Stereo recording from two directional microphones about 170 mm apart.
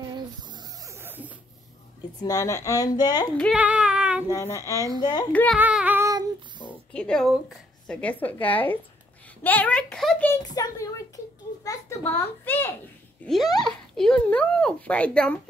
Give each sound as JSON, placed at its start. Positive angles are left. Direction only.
{"t": 0.1, "sound": "a sound", "side_deg": -25}
{"t": 2.2, "sound": "speech", "side_deg": 20}
{"t": 3.5, "sound": "child singing", "side_deg": -5}
{"t": 4.3, "sound": "speech", "side_deg": 15}
{"t": 5.6, "sound": "child singing", "side_deg": -10}
{"t": 6.7, "sound": "a woman's voice", "side_deg": 5}
{"t": 10.3, "sound": "a child's voice", "side_deg": 20}
{"t": 13.2, "sound": "speech", "side_deg": 0}